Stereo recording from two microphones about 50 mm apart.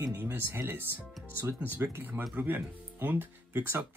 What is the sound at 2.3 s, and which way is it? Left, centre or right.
Speech, right.